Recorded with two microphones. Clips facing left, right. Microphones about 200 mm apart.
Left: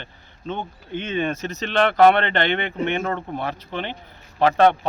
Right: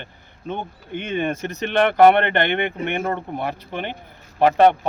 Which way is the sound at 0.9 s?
55° right (ahead or behind).